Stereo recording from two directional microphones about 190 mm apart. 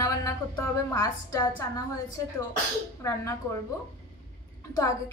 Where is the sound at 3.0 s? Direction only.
15° left (ahead or behind).